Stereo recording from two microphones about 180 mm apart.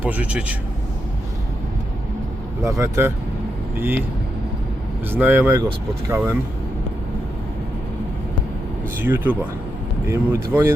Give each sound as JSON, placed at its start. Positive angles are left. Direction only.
{"t": 0.0, "sound": "speech", "side_deg": -10}
{"t": 2.6, "sound": "speech", "side_deg": -15}
{"t": 5.1, "sound": "speech", "side_deg": -10}
{"t": 9.0, "sound": "speech", "side_deg": -10}